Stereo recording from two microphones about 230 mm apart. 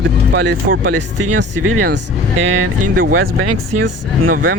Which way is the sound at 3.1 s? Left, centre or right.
Right.